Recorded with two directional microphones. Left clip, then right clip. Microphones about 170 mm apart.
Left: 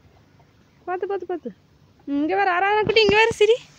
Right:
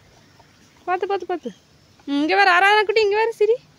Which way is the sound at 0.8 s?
20° right (ahead or behind).